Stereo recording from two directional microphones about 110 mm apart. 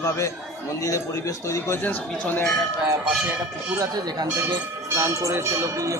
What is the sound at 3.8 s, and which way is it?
Speech, 35° right (ahead or behind).